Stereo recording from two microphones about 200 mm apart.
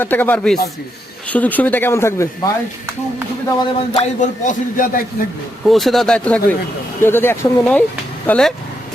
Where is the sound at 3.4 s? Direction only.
20° left (ahead or behind).